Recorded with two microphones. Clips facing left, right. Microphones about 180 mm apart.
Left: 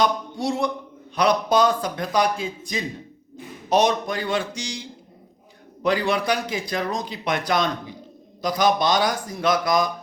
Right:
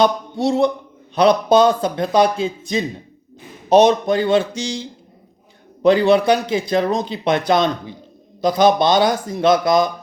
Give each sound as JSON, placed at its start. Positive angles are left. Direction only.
{"t": 0.0, "sound": "a man's voice", "side_deg": -25}